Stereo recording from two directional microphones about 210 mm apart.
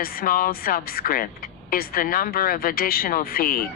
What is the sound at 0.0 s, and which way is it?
A woman's voice, 45° left (ahead or behind).